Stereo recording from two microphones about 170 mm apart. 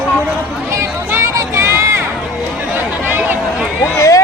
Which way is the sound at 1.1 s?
15° right (ahead or behind).